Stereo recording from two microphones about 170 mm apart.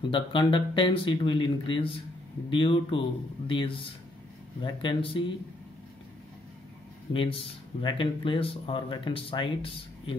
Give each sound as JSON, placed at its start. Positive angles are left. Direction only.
{"t": 0.1, "sound": "speech", "side_deg": 30}
{"t": 7.1, "sound": "speech", "side_deg": 30}